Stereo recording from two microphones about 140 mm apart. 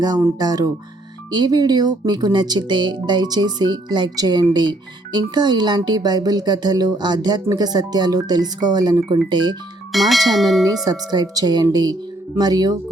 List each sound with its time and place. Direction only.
0.0 s speech: 30° right (ahead or behind)
9.9 s bell: centre (ahead or behind)
10.8 s speech: 30° right (ahead or behind)